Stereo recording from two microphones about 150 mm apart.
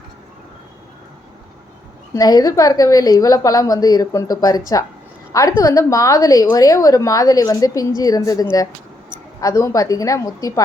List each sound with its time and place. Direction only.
2.1 s a woman's voice: 25° left (ahead or behind)